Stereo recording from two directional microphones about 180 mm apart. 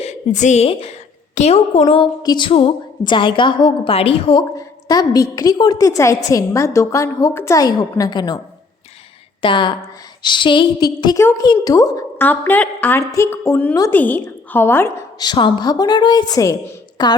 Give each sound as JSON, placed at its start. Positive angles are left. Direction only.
{"t": 0.0, "sound": "a woman's voice", "side_deg": 40}
{"t": 9.4, "sound": "a woman's voice", "side_deg": 25}